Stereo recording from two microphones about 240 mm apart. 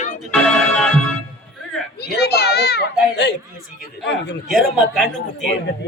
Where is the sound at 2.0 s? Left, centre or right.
Left.